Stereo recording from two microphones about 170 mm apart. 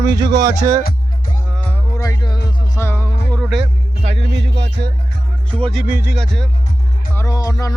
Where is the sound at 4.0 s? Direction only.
35° right (ahead or behind).